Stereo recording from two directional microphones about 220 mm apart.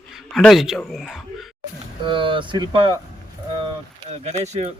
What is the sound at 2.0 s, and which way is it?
Speech, 20° right (ahead or behind).